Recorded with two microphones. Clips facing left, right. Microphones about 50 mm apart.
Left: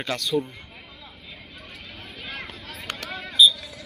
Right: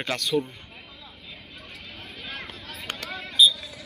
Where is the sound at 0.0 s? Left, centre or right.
Centre.